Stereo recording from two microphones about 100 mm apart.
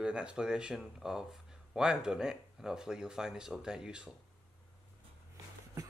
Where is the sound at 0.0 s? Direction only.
10° right (ahead or behind).